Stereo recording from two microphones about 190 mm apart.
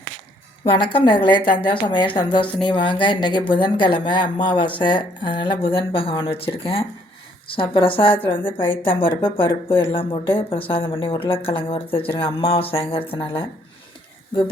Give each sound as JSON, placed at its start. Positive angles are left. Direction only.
{"t": 0.6, "sound": "speech", "side_deg": 30}